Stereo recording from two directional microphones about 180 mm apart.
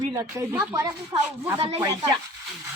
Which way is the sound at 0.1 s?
15° right (ahead or behind).